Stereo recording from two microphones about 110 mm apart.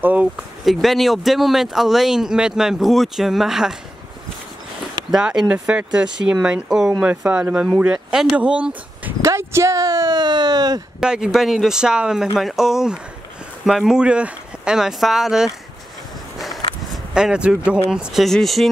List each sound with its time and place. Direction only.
0.0 s speech: 15° right (ahead or behind)
0.7 s speech: centre (ahead or behind)
5.1 s speech: 5° right (ahead or behind)
9.2 s a sound: 25° right (ahead or behind)
10.0 s siren: 45° right (ahead or behind)
11.0 s speech: 5° right (ahead or behind)
16.3 s a sound: centre (ahead or behind)
16.9 s speech: 5° right (ahead or behind)